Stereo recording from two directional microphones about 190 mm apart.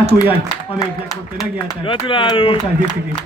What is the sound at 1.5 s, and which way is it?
Speech, 30° left (ahead or behind).